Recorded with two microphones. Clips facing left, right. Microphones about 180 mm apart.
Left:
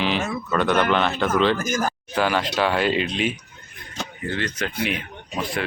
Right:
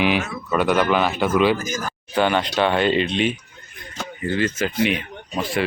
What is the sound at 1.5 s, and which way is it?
Speech, 50° left (ahead or behind).